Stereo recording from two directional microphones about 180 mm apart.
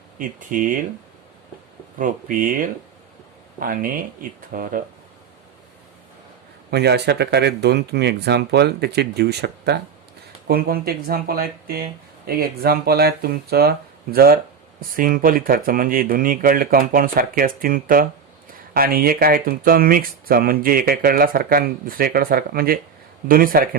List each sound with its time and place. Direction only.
0.2 s speech: 50° right (ahead or behind)
2.0 s speech: 50° right (ahead or behind)
6.7 s speech: 65° right (ahead or behind)
10.4 s speech: 55° right (ahead or behind)